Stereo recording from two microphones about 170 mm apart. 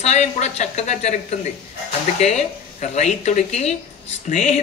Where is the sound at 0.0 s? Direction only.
40° left (ahead or behind).